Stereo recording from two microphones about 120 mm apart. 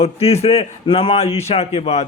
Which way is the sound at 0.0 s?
55° left (ahead or behind).